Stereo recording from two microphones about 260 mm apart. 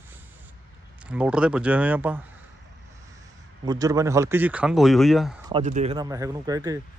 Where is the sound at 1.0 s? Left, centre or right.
Centre.